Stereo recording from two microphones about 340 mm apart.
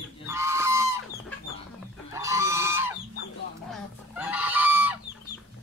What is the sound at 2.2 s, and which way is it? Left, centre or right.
Fowl, centre.